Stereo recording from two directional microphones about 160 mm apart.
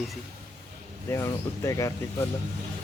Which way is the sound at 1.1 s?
20° left (ahead or behind).